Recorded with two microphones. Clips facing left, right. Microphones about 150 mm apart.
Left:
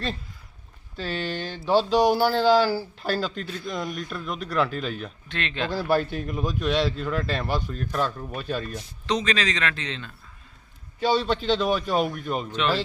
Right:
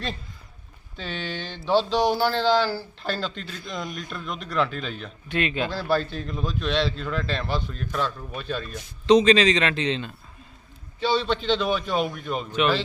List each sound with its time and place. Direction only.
0.9 s speech: 5° left (ahead or behind)
5.3 s speech: 10° right (ahead or behind)
5.7 s speech: 10° left (ahead or behind)
9.0 s a man's voice: 20° right (ahead or behind)
11.0 s a man's voice: 45° left (ahead or behind)
11.7 s speech: 5° left (ahead or behind)
12.5 s speech: 10° right (ahead or behind)